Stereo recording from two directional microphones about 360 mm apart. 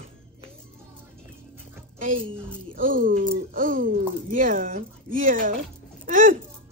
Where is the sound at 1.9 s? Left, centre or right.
Right.